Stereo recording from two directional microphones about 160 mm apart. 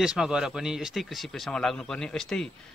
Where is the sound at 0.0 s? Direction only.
5° right (ahead or behind).